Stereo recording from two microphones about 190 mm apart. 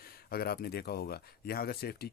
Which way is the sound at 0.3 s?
55° left (ahead or behind).